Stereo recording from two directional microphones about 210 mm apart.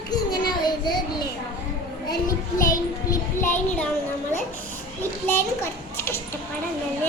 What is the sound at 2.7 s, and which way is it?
Child singing, 15° left (ahead or behind).